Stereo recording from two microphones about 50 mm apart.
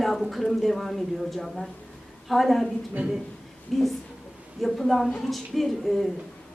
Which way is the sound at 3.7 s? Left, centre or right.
Centre.